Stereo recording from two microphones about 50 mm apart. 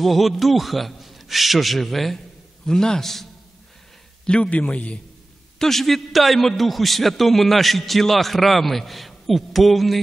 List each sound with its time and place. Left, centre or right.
0.0 s a man's voice: centre
4.3 s a man's voice: left
5.6 s a man's voice: centre